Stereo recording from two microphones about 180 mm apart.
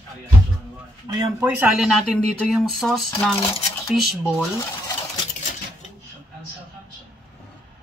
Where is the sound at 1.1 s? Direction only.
20° right (ahead or behind).